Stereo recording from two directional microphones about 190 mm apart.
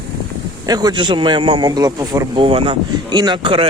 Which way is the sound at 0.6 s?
20° right (ahead or behind).